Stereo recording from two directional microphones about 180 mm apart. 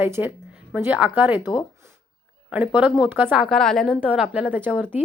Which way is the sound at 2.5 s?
10° right (ahead or behind).